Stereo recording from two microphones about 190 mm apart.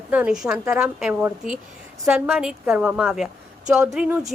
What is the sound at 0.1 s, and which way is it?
A woman's voice, 5° right (ahead or behind).